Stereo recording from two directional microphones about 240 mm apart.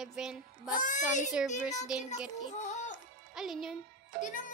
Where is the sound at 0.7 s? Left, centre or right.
Left.